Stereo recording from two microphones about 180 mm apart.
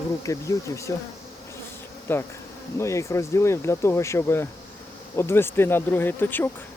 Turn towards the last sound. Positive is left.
turn(degrees=10)  # may be behind; listen again after turning